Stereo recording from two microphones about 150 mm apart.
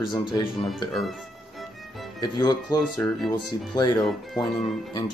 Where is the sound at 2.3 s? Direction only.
25° left (ahead or behind).